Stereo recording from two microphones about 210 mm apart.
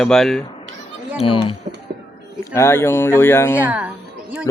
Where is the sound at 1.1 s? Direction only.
25° left (ahead or behind).